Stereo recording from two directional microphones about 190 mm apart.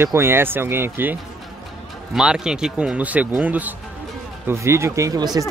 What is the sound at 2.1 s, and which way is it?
Speech, 5° right (ahead or behind).